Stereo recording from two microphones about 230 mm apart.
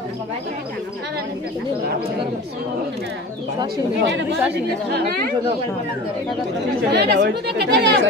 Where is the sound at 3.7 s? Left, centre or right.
Right.